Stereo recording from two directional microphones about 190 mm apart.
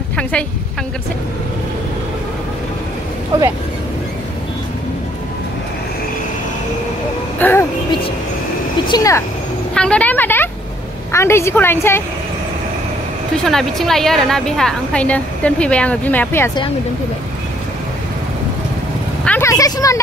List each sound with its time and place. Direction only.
0.2 s a woman's voice: 5° left (ahead or behind)
7.3 s speech: 10° left (ahead or behind)
8.8 s speech: 20° left (ahead or behind)
9.8 s a woman's voice: 5° left (ahead or behind)
13.4 s a woman's voice: centre (ahead or behind)
19.2 s vehicle: 10° left (ahead or behind)